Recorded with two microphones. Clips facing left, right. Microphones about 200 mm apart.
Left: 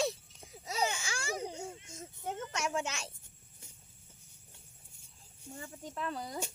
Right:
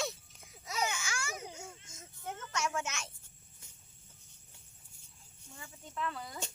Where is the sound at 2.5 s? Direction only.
30° left (ahead or behind).